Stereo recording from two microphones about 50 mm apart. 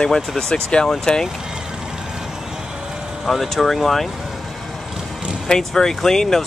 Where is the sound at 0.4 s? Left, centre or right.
Centre.